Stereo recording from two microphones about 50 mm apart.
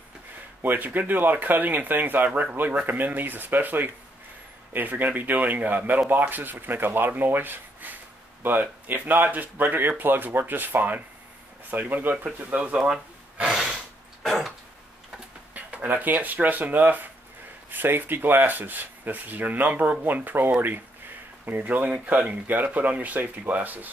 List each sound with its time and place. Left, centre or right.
0.6 s speech: right
12.4 s speech: right
13.5 s gasp: centre
14.2 s dog: centre
15.5 s a sound: right
15.9 s speech: right